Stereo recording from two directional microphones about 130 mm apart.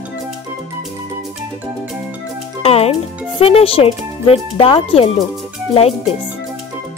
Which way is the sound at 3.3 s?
45° left (ahead or behind).